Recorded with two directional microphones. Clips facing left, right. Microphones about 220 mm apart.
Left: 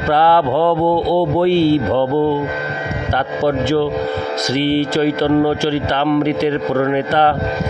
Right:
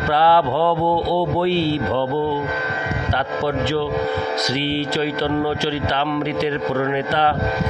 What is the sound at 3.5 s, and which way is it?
Speech, 45° left (ahead or behind).